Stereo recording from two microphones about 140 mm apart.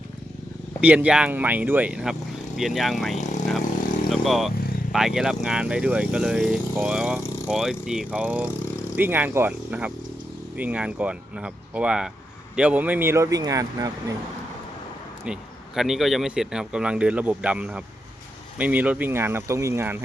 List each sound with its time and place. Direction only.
0.8 s a man's voice: 10° right (ahead or behind)
15.2 s a man's voice: 5° right (ahead or behind)